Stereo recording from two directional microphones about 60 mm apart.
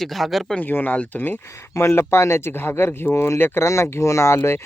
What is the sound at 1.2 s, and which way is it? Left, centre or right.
Speech, left.